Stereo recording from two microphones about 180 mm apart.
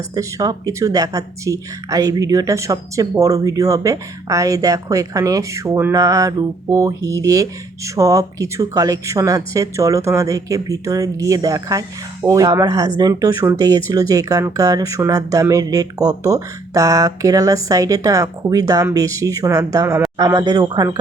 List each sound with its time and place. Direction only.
0.1 s speech: 20° right (ahead or behind)